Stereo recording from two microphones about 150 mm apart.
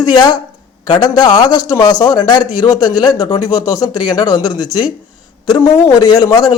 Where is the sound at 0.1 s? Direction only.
30° left (ahead or behind).